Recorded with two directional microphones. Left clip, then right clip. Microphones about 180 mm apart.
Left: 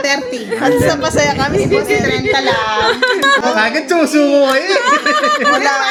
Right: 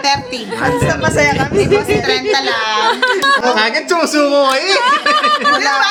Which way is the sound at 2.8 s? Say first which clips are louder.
Even; 15° left (ahead or behind).